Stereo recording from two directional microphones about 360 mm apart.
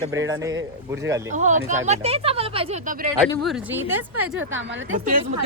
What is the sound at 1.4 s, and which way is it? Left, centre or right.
Speech, centre.